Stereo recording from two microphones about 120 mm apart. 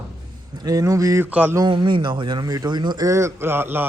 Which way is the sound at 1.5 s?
40° right (ahead or behind).